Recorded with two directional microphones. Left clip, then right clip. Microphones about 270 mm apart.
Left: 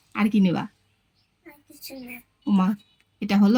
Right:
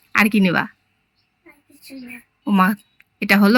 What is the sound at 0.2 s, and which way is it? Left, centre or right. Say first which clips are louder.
Speech: right 8 dB; centre.